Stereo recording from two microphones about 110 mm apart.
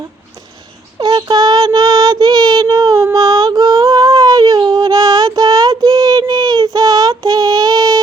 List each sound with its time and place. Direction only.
0.9 s child singing: 40° right (ahead or behind)
3.0 s a sound: 30° right (ahead or behind)
6.7 s child singing: 35° right (ahead or behind)